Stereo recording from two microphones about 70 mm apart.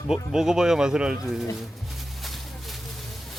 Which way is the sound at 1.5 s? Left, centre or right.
Centre.